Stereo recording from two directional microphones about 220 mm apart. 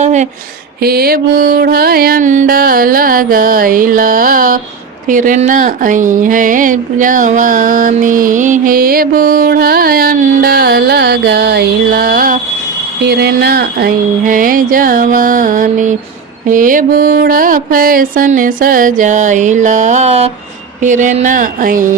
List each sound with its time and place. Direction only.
0.0 s speech: 30° right (ahead or behind)
0.8 s speech: 45° right (ahead or behind)